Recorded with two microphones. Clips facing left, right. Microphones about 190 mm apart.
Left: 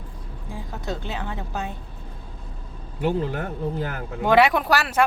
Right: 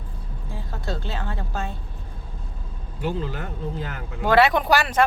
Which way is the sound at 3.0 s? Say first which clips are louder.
Left 4 dB; 60° left (ahead or behind).